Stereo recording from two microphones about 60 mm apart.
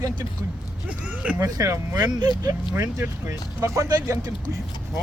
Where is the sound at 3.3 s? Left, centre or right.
Right.